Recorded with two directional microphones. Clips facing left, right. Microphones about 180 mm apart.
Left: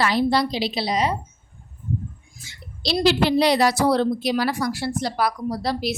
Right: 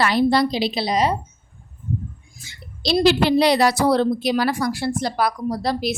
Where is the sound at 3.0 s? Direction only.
65° right (ahead or behind).